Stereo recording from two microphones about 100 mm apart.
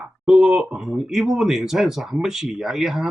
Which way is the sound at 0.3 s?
5° right (ahead or behind).